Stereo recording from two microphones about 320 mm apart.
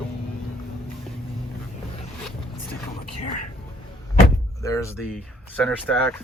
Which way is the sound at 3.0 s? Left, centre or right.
Left.